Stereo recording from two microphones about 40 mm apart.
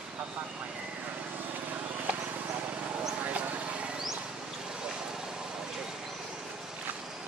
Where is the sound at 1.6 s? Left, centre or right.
Right.